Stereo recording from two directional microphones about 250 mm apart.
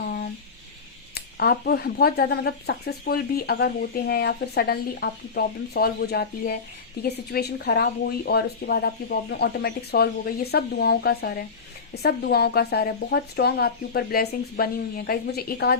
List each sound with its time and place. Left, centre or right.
1.1 s speech: left